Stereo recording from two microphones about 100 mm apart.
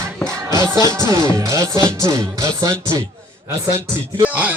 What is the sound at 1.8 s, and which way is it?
Music, 30° right (ahead or behind).